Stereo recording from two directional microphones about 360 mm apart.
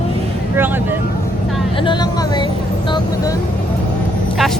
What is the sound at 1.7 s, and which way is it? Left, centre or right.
Speech, centre.